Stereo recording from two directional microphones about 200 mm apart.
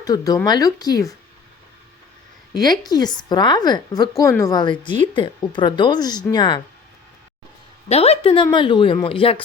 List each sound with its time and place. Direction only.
0.0 s speech: 20° left (ahead or behind)
2.5 s a woman's voice: 20° left (ahead or behind)
7.9 s a woman's voice: 30° left (ahead or behind)